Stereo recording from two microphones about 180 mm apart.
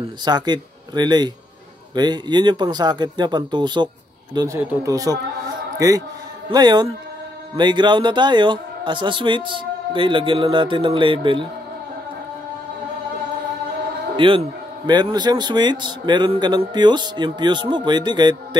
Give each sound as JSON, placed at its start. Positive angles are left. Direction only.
{"t": 0.2, "sound": "a man's voice", "side_deg": -25}
{"t": 14.1, "sound": "a man's voice", "side_deg": -30}